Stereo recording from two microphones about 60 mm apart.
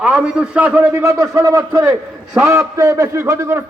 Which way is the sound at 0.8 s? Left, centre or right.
Right.